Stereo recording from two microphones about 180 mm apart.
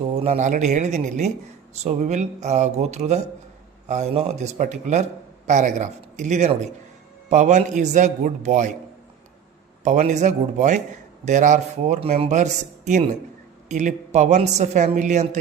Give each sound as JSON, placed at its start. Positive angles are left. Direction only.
{"t": 0.1, "sound": "a man's voice", "side_deg": -40}
{"t": 9.8, "sound": "speech", "side_deg": -40}